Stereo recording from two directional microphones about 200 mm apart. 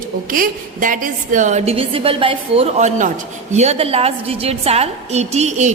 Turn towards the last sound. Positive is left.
turn(degrees=-35)  # may be behind; listen again after turning